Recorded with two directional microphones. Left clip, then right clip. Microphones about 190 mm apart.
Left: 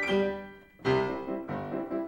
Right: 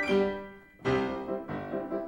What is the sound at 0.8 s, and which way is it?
Music, 25° left (ahead or behind).